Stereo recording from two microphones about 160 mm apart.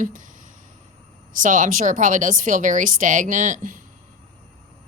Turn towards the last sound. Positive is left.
turn(degrees=-55)  # may be behind; listen again after turning